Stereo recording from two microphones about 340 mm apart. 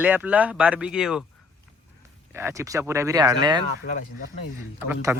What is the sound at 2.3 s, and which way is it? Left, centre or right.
Speech, centre.